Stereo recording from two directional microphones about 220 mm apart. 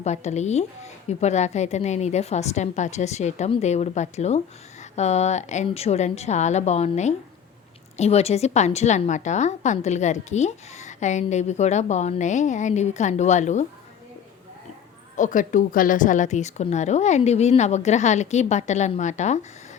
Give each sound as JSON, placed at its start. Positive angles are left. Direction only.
{"t": 0.0, "sound": "a woman's voice", "side_deg": 30}
{"t": 15.1, "sound": "a woman's voice", "side_deg": 35}